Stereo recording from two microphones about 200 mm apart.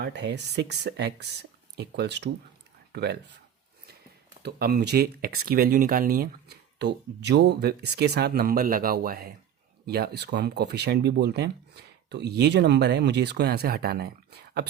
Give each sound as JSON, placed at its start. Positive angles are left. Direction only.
{"t": 0.0, "sound": "speech", "side_deg": -60}
{"t": 4.4, "sound": "speech", "side_deg": -55}